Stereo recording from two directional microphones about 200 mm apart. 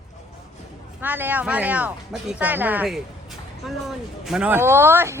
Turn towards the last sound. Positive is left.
turn(degrees=-10)  # may be behind; listen again after turning